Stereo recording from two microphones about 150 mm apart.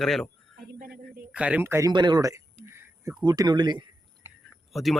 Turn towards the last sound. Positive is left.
turn(degrees=0)  # may be behind; listen again after turning